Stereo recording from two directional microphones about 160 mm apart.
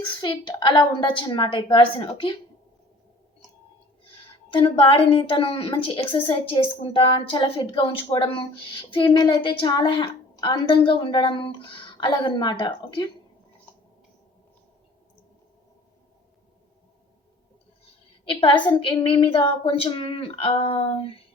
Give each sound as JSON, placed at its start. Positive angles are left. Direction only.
{"t": 0.0, "sound": "a woman's voice", "side_deg": 30}
{"t": 4.5, "sound": "a woman's voice", "side_deg": 30}
{"t": 18.3, "sound": "a woman's voice", "side_deg": 30}